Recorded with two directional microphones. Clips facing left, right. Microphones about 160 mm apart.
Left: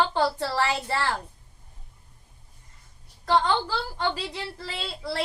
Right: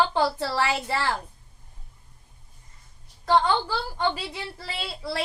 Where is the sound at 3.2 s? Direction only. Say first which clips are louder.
Right 1 dB; 20° right (ahead or behind).